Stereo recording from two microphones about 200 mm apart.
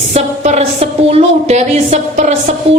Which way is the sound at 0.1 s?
35° right (ahead or behind).